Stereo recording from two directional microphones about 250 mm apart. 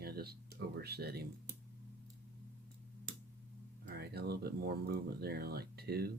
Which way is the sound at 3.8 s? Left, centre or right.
Right.